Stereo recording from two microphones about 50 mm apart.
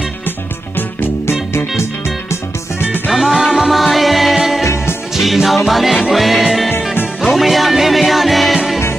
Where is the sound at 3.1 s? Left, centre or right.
Centre.